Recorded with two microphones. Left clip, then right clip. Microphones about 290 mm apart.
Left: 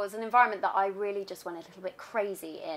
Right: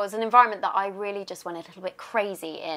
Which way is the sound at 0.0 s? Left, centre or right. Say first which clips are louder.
Right 6 dB; right.